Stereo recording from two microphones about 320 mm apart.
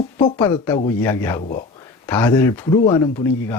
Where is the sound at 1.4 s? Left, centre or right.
Left.